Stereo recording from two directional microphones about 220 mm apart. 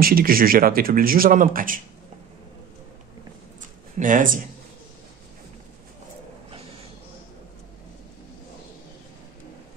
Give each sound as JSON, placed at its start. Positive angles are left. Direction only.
{"t": 0.0, "sound": "speech", "side_deg": -40}
{"t": 4.0, "sound": "speech", "side_deg": -35}